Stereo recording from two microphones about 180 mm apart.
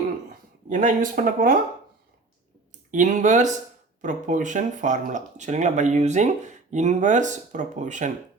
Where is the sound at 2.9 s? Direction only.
45° right (ahead or behind).